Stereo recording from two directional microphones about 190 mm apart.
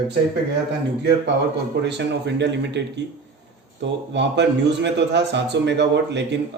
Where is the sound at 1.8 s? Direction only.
65° right (ahead or behind).